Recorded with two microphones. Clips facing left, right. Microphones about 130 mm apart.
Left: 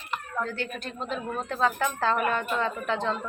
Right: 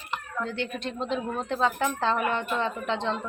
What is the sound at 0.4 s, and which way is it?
A woman's voice, 20° right (ahead or behind).